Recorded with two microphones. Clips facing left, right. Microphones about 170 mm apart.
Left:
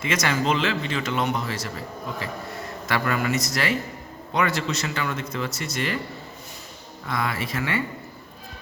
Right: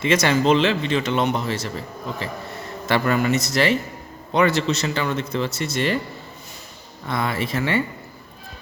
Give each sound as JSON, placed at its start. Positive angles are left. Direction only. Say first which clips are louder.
{"t": 0.0, "sound": "speech", "louder": "right 6 dB", "side_deg": -30}
{"t": 2.8, "sound": "speech", "louder": "right 5 dB", "side_deg": -25}
{"t": 7.1, "sound": "speech", "louder": "right 3 dB", "side_deg": -25}